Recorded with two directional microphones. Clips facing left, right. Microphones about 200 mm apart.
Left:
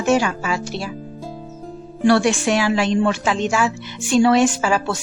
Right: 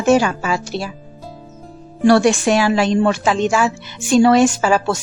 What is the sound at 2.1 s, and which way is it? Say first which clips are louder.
A woman's voice: right 3 dB; 40° right (ahead or behind).